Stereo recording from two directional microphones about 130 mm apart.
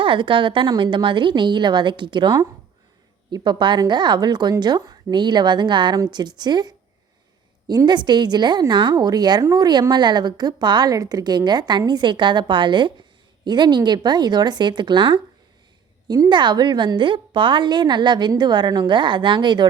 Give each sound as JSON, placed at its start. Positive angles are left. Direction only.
{"t": 0.0, "sound": "a woman's voice", "side_deg": -40}